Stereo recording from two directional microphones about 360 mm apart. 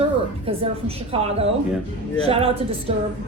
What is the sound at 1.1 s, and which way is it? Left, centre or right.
Speech, centre.